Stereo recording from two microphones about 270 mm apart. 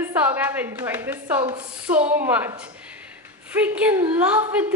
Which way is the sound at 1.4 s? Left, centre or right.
Centre.